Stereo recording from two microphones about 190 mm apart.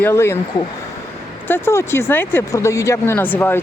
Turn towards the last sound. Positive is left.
turn(degrees=10)  # may be behind; listen again after turning